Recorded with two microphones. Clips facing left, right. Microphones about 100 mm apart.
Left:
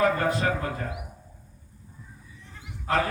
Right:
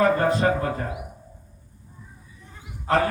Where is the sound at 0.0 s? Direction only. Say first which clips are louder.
Right 4 dB; 35° right (ahead or behind).